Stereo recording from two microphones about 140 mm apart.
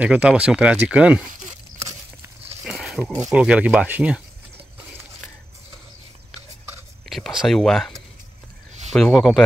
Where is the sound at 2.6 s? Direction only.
5° right (ahead or behind).